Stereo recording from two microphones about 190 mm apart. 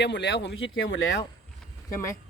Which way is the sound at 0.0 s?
65° left (ahead or behind).